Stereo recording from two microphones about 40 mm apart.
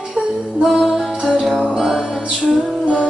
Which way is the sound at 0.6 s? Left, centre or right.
Centre.